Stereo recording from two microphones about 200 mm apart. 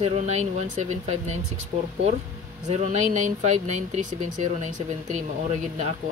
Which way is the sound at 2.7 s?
35° right (ahead or behind).